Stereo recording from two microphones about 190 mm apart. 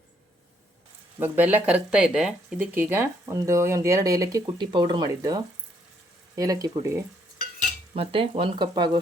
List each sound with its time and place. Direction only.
1.2 s speech: 10° right (ahead or behind)
7.9 s speech: 30° right (ahead or behind)